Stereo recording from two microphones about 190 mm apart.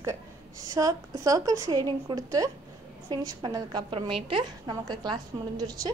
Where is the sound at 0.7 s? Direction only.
20° right (ahead or behind).